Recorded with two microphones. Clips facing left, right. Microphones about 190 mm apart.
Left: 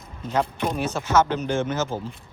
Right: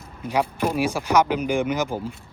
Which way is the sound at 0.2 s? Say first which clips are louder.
Right 1 dB; 10° right (ahead or behind).